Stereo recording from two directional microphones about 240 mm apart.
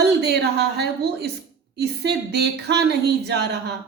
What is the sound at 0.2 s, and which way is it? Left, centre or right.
A woman's voice, right.